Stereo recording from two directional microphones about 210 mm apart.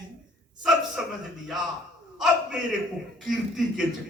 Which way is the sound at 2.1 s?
Centre (ahead or behind).